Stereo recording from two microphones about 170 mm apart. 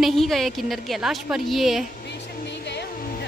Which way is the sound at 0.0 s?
Centre (ahead or behind).